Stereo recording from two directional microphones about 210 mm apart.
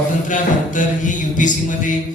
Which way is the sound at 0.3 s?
40° left (ahead or behind).